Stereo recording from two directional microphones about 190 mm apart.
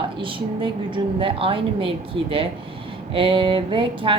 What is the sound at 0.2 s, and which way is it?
A woman's voice, 25° right (ahead or behind).